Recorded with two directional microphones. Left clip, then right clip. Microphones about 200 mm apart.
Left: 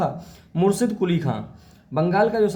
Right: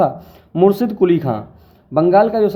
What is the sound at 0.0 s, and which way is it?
A man's voice, 35° right (ahead or behind).